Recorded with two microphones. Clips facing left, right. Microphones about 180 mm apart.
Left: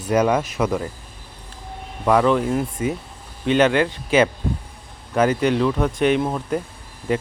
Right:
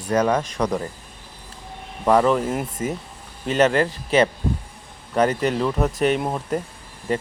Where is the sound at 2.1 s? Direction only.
Centre (ahead or behind).